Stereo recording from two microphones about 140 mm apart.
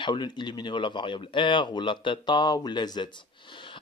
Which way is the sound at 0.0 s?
35° left (ahead or behind).